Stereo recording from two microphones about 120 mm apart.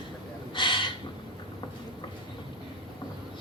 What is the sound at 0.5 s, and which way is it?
Gasp, 40° left (ahead or behind).